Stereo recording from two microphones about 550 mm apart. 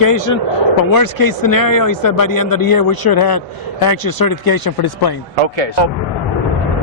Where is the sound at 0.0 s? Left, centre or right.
Left.